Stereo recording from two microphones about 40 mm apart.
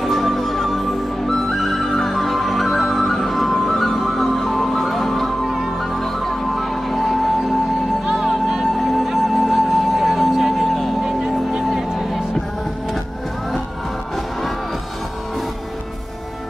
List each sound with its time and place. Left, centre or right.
0.0 s music: centre
5.8 s music: centre
8.0 s music: centre
11.0 s music: centre